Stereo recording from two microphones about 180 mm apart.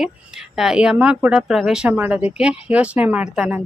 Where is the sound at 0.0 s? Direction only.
Centre (ahead or behind).